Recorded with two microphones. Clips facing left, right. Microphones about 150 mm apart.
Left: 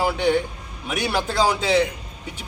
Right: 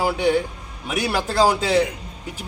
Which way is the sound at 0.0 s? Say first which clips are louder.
Right 1 dB; 5° right (ahead or behind).